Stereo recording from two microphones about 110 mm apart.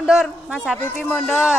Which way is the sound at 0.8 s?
15° left (ahead or behind).